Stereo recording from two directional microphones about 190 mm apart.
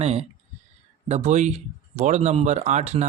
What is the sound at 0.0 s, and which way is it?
Speech, 35° right (ahead or behind).